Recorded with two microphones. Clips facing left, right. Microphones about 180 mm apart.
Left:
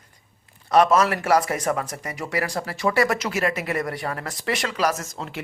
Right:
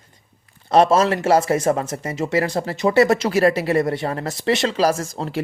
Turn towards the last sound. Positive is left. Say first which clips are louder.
# right 6 dB
turn(degrees=-35)  # may be behind; listen again after turning